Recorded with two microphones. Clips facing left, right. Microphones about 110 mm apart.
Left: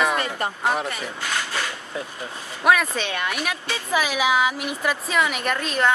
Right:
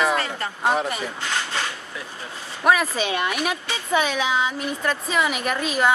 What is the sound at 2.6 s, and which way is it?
Speech, 5° right (ahead or behind).